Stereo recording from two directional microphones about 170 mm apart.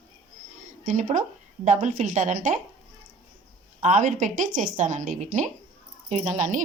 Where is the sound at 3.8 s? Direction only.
45° right (ahead or behind).